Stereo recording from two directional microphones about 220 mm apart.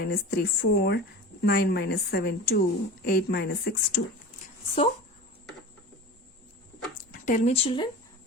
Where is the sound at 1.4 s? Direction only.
45° left (ahead or behind).